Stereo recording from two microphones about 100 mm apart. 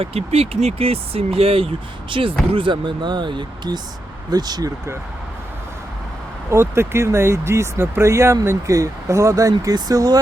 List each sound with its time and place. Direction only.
0.0 s speech: 85° right; by 4.7 s 45° right (ahead or behind)
6.5 s speech: 25° right (ahead or behind); by 10.2 s 40° right (ahead or behind)